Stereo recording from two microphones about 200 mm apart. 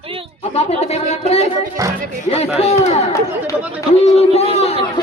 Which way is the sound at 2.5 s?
30° left (ahead or behind).